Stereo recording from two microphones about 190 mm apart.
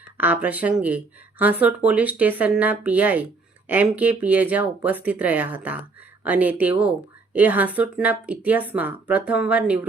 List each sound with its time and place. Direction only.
0.2 s speech: 10° right (ahead or behind)